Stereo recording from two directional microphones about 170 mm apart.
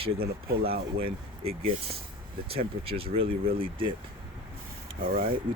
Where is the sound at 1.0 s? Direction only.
35° right (ahead or behind).